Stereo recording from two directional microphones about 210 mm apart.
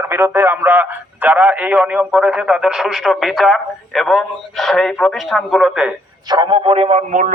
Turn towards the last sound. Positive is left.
turn(degrees=-35)  # may be behind; listen again after turning